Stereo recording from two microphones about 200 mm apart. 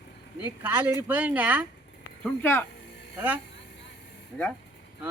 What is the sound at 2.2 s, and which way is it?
Speech, 10° left (ahead or behind).